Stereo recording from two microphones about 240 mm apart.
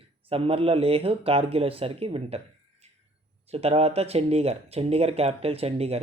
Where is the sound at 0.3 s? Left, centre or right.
Right.